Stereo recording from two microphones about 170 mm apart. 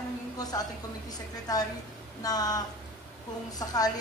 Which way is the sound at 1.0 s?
20° left (ahead or behind).